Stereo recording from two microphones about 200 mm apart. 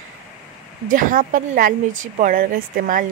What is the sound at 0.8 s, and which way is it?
A woman's voice, 40° right (ahead or behind).